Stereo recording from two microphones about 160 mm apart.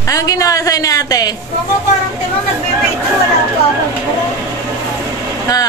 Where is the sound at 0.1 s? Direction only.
20° left (ahead or behind).